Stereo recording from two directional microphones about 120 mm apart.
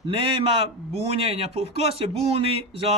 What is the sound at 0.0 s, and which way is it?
A man's voice, 50° right (ahead or behind).